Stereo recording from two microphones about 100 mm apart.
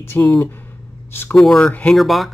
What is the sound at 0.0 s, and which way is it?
Speech, 30° left (ahead or behind).